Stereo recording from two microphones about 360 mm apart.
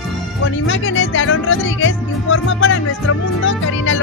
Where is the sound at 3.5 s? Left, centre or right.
Left.